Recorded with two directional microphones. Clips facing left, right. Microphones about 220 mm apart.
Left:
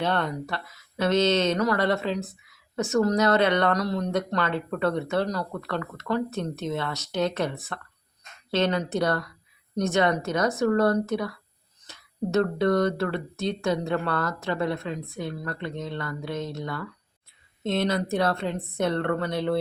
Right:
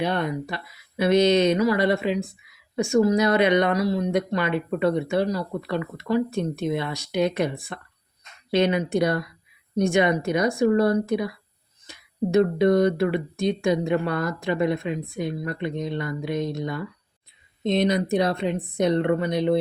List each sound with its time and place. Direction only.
0.0 s speech: 15° right (ahead or behind)